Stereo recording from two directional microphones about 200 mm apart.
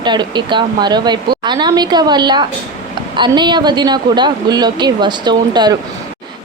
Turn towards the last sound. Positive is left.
turn(degrees=-20)  # may be behind; listen again after turning